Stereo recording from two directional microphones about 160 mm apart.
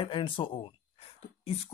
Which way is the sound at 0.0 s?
30° left (ahead or behind).